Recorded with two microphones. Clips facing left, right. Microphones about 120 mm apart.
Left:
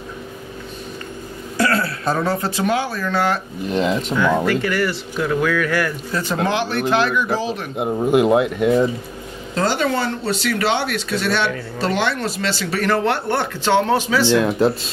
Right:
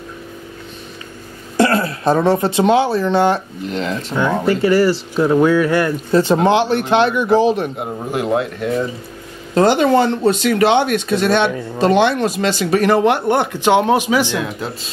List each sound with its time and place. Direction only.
1.6 s speech: 20° right (ahead or behind)
3.7 s speech: 15° left (ahead or behind)
4.2 s speech: 25° right (ahead or behind)
7.8 s speech: 20° left (ahead or behind)
9.6 s speech: 20° right (ahead or behind)